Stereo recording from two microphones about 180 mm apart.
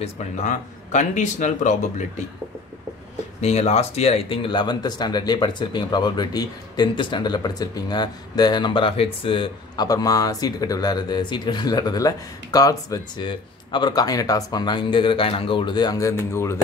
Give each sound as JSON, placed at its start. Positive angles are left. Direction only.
{"t": 0.0, "sound": "speech", "side_deg": 40}
{"t": 3.3, "sound": "speech", "side_deg": 35}